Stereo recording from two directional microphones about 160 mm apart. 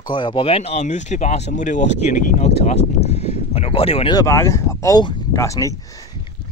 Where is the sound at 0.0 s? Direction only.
30° left (ahead or behind).